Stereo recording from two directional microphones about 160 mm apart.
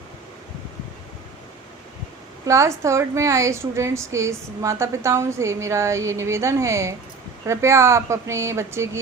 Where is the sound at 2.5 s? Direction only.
20° right (ahead or behind).